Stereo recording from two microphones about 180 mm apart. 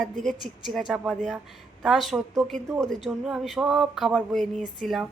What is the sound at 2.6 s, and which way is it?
Speech, 20° right (ahead or behind).